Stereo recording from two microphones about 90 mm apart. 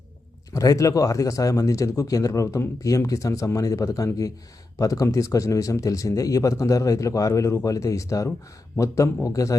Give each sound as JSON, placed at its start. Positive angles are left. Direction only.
{"t": 0.5, "sound": "a man's voice", "side_deg": 40}